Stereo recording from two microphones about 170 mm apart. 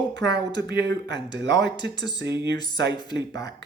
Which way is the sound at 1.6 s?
90° right.